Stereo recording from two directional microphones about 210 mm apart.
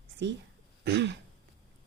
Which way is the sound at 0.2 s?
55° right (ahead or behind).